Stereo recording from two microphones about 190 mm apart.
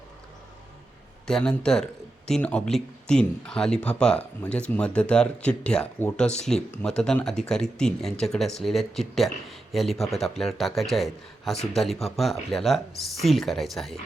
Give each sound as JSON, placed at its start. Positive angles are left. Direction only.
{"t": 1.3, "sound": "speech", "side_deg": 5}